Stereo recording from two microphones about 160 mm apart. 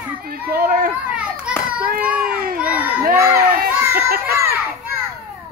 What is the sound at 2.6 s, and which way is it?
Crowd, 10° right (ahead or behind).